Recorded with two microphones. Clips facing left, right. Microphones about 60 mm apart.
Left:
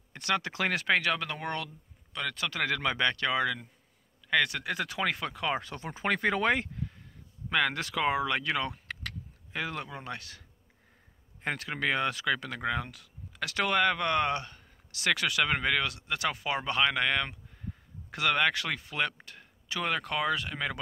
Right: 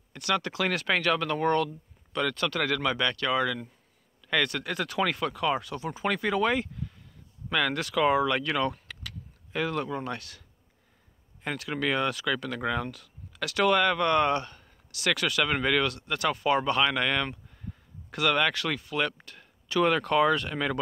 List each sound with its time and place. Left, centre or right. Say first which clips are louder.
0.1 s speech: right 2 dB; left
5.6 s speech: right 4 dB; left
7.5 s speech: right 2 dB; left
10.1 s speech: right 3 dB; left
11.4 s speech: even; left
11.7 s speech: right 3 dB; left
14.9 s speech: right 1 dB; left
19.8 s speech: right 8 dB; centre